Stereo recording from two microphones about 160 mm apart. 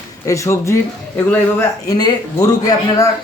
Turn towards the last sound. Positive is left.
turn(degrees=20)  # may be behind; listen again after turning